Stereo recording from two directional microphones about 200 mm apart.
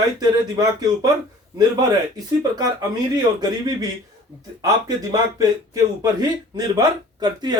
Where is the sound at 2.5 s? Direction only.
20° right (ahead or behind).